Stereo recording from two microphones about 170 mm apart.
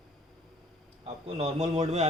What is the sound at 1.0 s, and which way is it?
A man's voice, 35° right (ahead or behind).